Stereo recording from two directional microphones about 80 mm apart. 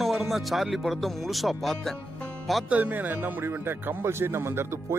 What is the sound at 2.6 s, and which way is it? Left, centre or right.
Speech, centre.